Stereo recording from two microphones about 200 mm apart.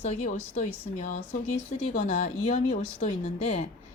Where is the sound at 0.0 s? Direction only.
35° left (ahead or behind).